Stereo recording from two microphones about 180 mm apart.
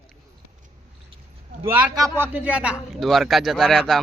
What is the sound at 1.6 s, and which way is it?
A man's voice, 15° right (ahead or behind).